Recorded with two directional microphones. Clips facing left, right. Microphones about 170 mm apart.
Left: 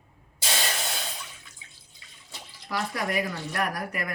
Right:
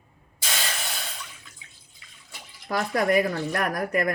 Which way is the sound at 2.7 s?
50° right (ahead or behind).